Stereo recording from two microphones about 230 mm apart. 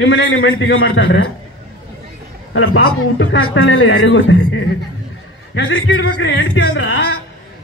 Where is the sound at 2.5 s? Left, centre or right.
Left.